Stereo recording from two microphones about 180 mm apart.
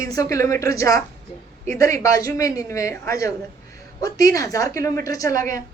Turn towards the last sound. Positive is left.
turn(degrees=15)  # may be behind; listen again after turning